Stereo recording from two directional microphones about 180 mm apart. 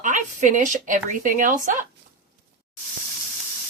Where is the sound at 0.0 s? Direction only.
45° right (ahead or behind).